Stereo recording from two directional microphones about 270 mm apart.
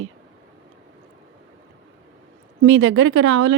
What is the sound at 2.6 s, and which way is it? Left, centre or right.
Speech, right.